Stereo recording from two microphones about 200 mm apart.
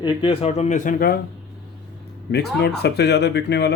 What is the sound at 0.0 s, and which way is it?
Speech, 25° left (ahead or behind).